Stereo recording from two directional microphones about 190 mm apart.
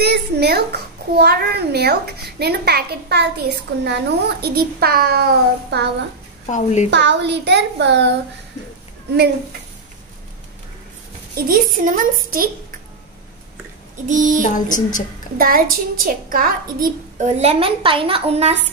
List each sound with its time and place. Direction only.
0.0 s a child's voice: 60° right (ahead or behind)
6.4 s a sound: 40° left (ahead or behind)
6.9 s a child's voice: 65° right (ahead or behind)
11.4 s a woman's voice: 45° right (ahead or behind)
14.0 s a child's voice: 40° right (ahead or behind)
14.5 s a sound: 40° left (ahead or behind)
15.3 s a child's voice: 50° right (ahead or behind); by 18.5 s 30° right (ahead or behind)